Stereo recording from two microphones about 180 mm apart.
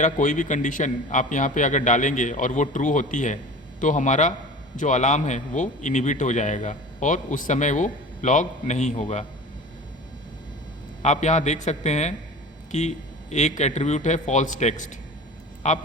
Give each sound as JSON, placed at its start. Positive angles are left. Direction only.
{"t": 0.0, "sound": "a man's voice", "side_deg": 45}
{"t": 11.0, "sound": "speech", "side_deg": 40}
{"t": 13.3, "sound": "speech", "side_deg": 40}